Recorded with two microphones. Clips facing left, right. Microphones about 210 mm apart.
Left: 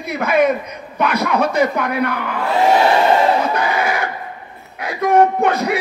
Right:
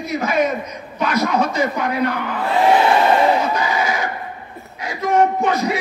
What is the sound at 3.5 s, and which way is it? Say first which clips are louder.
A man's voice: left 2 dB; 60° left (ahead or behind).